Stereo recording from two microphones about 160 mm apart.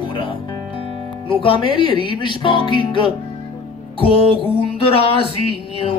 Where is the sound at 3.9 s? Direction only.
35° left (ahead or behind).